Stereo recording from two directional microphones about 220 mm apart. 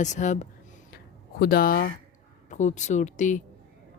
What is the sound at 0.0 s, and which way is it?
Speech, 35° left (ahead or behind).